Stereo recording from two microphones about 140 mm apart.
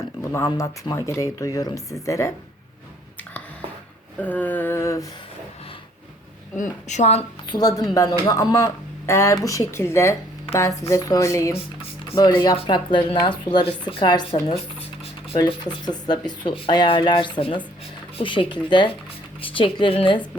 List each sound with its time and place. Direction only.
0.3 s speech: 20° left (ahead or behind)
4.2 s a sound: 10° left (ahead or behind)
6.6 s a woman's voice: 55° left (ahead or behind)
7.5 s speech: 25° left (ahead or behind)
12.5 s speech: 35° left (ahead or behind)
15.4 s speech: 30° left (ahead or behind)